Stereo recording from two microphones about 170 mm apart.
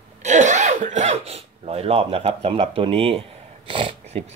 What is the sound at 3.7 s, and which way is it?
Speech, 30° right (ahead or behind).